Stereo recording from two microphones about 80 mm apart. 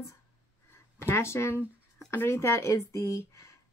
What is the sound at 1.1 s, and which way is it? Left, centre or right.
Speech, left.